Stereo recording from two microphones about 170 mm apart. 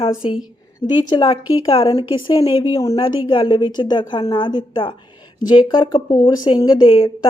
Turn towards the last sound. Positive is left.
turn(degrees=30)  # may be behind; listen again after turning